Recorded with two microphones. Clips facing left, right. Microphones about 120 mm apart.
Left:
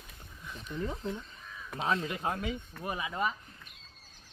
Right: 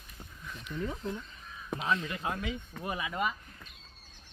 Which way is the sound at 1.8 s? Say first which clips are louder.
Left 2 dB; 35° left (ahead or behind).